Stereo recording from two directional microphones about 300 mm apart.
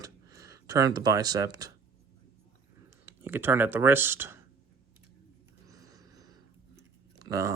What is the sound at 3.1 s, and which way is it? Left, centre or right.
Speech, centre.